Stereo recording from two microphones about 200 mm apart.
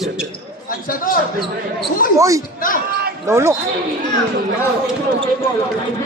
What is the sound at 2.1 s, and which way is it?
Speech, 15° right (ahead or behind).